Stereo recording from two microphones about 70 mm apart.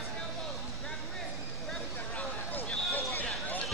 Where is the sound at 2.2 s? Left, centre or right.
Left.